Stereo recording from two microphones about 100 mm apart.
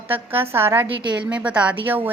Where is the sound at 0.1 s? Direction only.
20° right (ahead or behind).